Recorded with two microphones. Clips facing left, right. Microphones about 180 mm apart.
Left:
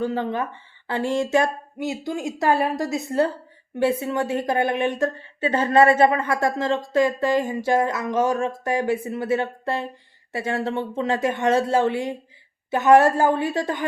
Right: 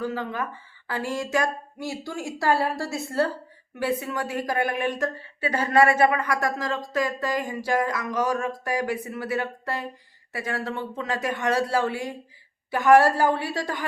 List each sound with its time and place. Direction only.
0.0 s a woman's voice: 25° left (ahead or behind)